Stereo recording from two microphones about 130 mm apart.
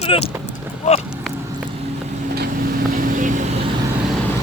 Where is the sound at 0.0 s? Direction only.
50° left (ahead or behind).